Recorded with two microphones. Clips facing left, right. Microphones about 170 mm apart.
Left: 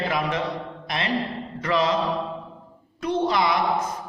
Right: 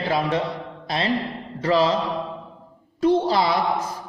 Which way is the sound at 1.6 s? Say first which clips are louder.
Right 4 dB; 30° right (ahead or behind).